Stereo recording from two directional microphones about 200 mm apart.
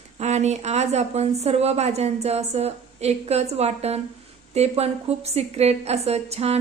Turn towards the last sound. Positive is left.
turn(degrees=-30)  # may be behind; listen again after turning